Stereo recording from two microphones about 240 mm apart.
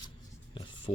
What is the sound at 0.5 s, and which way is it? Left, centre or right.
Writing, left.